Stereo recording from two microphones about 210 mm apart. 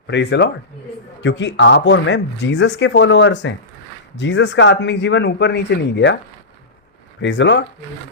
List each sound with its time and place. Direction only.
0.1 s speech: 55° left (ahead or behind)
7.2 s speech: 60° left (ahead or behind)